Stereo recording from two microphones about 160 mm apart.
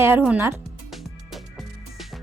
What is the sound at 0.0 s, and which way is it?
Speech, 10° right (ahead or behind).